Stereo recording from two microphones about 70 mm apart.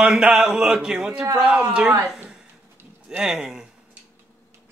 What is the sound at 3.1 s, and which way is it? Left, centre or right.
Speech, centre.